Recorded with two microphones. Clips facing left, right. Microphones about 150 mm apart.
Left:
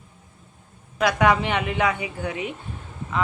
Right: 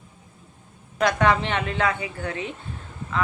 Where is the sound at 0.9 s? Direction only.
10° left (ahead or behind).